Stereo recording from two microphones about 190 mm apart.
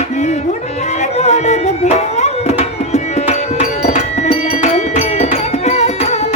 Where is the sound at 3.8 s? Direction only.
35° left (ahead or behind).